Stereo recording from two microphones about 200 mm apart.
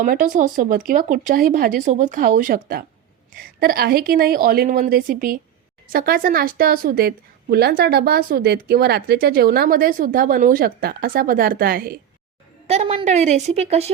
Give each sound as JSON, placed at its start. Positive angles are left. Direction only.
{"t": 0.0, "sound": "a woman's voice", "side_deg": -40}
{"t": 12.6, "sound": "a woman's voice", "side_deg": -30}